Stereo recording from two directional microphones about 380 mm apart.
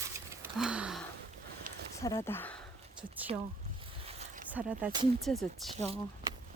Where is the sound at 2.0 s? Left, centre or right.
Centre.